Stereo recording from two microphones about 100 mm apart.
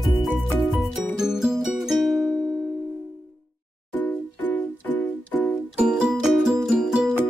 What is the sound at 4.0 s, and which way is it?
Music, 20° left (ahead or behind).